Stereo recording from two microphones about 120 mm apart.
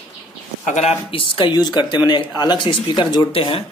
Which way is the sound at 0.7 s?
75° left (ahead or behind).